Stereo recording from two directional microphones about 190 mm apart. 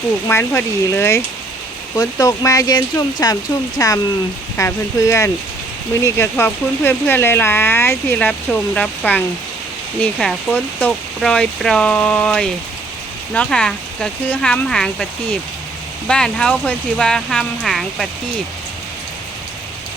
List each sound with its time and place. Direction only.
0.3 s speech: 10° left (ahead or behind)